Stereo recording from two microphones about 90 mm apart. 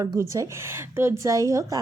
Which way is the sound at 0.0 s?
35° right (ahead or behind).